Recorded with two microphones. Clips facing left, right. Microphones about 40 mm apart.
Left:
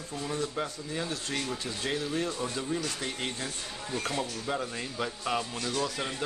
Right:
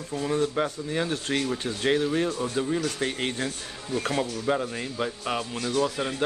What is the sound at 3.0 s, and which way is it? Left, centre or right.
Speech, right.